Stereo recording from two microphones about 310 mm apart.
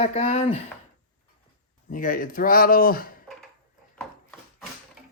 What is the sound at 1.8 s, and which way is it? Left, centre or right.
Speech, left.